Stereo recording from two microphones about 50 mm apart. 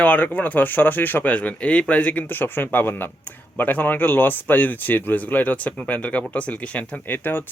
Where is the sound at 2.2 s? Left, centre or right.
Left.